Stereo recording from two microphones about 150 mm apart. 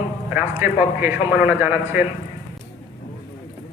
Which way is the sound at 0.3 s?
10° right (ahead or behind).